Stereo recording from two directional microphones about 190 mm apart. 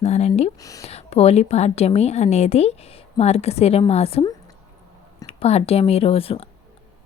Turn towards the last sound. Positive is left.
turn(degrees=30)  # may be behind; listen again after turning